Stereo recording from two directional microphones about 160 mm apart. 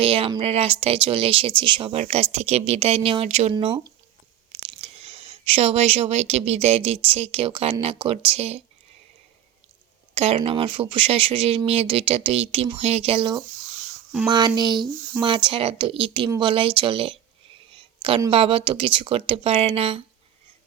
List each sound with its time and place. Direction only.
0.0 s speech: 35° right (ahead or behind)
3.5 s speech: 30° right (ahead or behind)
10.2 s speech: 40° right (ahead or behind)
17.7 s a sound: 35° right (ahead or behind)
18.3 s speech: 35° right (ahead or behind)